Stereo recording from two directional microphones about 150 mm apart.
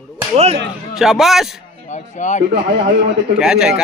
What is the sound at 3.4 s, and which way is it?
Speech, 5° right (ahead or behind).